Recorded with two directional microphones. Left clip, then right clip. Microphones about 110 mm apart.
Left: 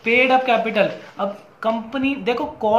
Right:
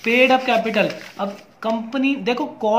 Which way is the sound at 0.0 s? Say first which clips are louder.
Even; 30° right (ahead or behind).